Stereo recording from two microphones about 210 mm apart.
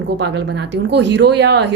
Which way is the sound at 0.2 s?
55° right (ahead or behind).